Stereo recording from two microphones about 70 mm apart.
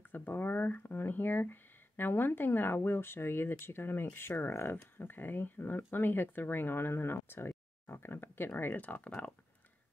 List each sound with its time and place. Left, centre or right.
0.1 s speech: left